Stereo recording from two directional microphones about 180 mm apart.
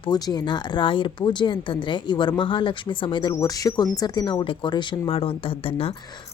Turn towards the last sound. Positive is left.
turn(degrees=30)  # may be behind; listen again after turning